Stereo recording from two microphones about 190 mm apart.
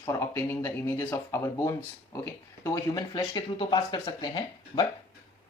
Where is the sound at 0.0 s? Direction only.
15° left (ahead or behind).